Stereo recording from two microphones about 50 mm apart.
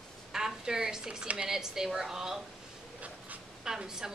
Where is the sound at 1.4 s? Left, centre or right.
Centre.